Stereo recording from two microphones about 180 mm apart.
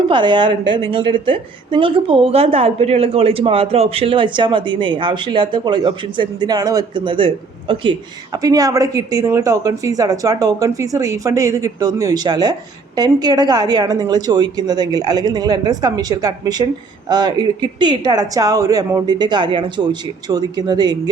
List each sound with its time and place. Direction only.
0.1 s a woman's voice: 25° right (ahead or behind)